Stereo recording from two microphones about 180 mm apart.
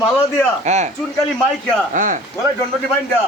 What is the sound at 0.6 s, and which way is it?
Speech, 40° right (ahead or behind).